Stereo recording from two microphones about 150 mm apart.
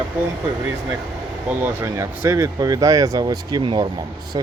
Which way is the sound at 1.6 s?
15° right (ahead or behind).